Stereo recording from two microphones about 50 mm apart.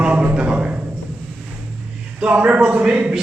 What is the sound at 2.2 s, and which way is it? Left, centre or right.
Speech, right.